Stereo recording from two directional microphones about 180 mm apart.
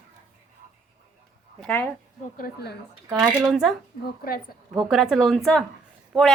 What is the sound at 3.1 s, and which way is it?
Speech, centre (ahead or behind).